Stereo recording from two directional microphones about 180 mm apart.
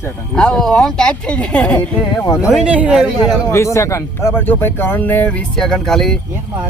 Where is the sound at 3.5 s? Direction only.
15° left (ahead or behind).